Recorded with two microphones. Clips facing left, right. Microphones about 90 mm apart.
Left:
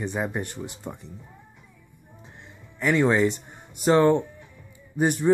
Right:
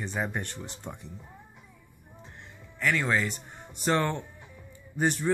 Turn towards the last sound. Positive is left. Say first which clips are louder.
# left 4 dB
turn(degrees=15)  # may be behind; listen again after turning